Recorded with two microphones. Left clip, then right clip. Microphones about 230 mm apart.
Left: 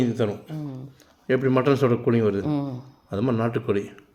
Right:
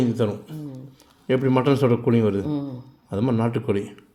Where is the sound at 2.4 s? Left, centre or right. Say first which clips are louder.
Left 1 dB; left.